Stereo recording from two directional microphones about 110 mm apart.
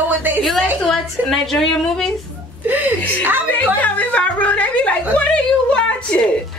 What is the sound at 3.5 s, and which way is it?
Speech, 15° left (ahead or behind).